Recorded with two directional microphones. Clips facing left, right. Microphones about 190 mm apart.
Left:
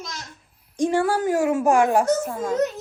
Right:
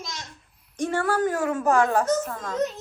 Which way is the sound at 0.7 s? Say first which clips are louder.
Left 4 dB; 15° left (ahead or behind).